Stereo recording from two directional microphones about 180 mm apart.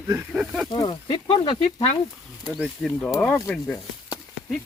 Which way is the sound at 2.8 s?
Centre (ahead or behind).